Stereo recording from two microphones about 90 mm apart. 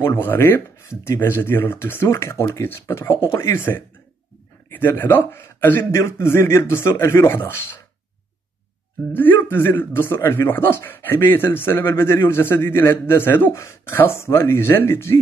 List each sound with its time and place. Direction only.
0.0 s speech: 30° left (ahead or behind)
9.1 s speech: 20° left (ahead or behind)